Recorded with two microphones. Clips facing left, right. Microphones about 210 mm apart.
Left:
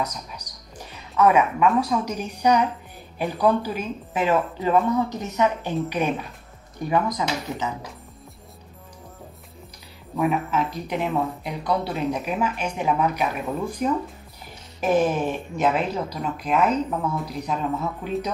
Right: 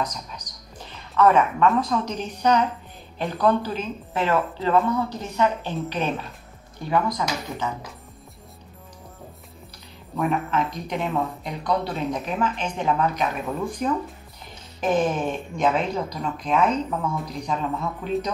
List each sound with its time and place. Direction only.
0.0 s a sound: 10° left (ahead or behind)
1.8 s speech: 10° left (ahead or behind)
10.1 s speech: 5° left (ahead or behind)